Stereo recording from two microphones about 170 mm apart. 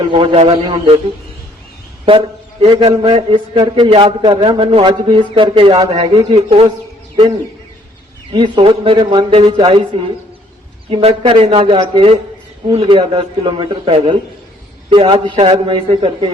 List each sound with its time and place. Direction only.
0.0 s a man's voice: 30° right (ahead or behind)
2.0 s a man's voice: 30° right (ahead or behind)
6.3 s a man's voice: 35° right (ahead or behind)
8.3 s a man's voice: 30° right (ahead or behind)
10.8 s a man's voice: 35° right (ahead or behind)